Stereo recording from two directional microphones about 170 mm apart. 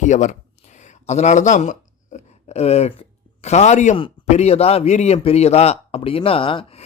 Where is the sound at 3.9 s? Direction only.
30° left (ahead or behind).